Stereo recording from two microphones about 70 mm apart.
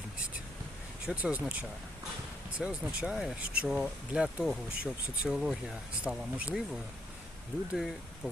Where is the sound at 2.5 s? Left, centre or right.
Centre.